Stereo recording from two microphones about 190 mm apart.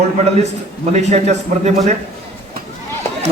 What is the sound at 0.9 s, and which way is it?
A man's voice, 35° right (ahead or behind).